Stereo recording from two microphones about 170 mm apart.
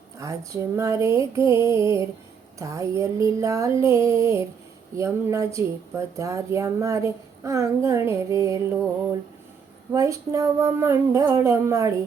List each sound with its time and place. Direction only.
0.2 s a sound: 20° right (ahead or behind)
6.1 s speech: 20° right (ahead or behind)
9.9 s speech: 20° right (ahead or behind)